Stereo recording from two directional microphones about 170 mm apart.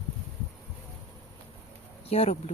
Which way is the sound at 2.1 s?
35° left (ahead or behind).